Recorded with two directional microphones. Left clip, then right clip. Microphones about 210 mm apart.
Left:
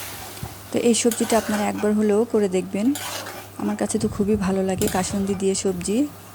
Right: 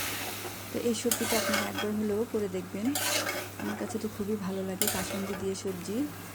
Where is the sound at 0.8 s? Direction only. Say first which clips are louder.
Left 11 dB; 55° left (ahead or behind).